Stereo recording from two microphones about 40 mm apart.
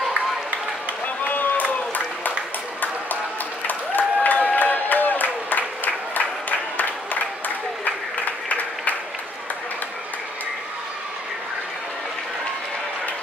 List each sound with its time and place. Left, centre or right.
1.2 s run: left
3.6 s applause: left
6.8 s applause: left